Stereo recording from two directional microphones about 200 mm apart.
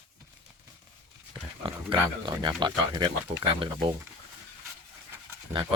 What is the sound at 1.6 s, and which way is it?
Speech, 25° right (ahead or behind).